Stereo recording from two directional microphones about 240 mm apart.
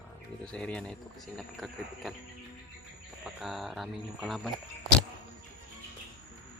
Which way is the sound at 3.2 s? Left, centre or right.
Centre.